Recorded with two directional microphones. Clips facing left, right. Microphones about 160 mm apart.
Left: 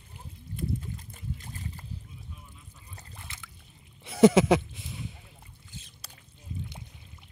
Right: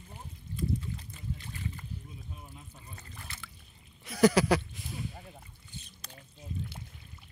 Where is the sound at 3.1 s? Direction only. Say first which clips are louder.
Left 1 dB; 20° left (ahead or behind).